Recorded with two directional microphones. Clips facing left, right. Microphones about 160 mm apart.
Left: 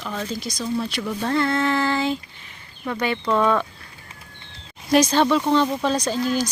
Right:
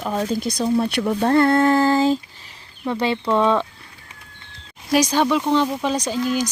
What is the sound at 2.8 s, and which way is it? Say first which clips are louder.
Speech: right 3 dB; 25° right (ahead or behind).